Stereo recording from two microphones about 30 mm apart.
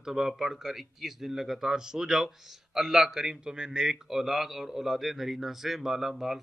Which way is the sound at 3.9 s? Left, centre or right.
Centre.